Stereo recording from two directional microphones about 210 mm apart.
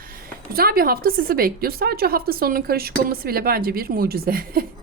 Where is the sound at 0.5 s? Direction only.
45° right (ahead or behind).